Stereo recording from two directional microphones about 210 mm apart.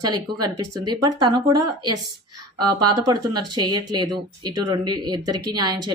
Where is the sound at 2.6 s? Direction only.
20° right (ahead or behind).